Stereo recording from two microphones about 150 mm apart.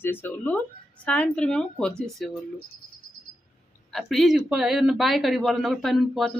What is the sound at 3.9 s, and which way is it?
Speech, centre (ahead or behind).